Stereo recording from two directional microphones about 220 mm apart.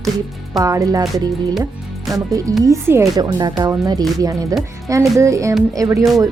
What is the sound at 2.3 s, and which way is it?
Speech, 15° right (ahead or behind).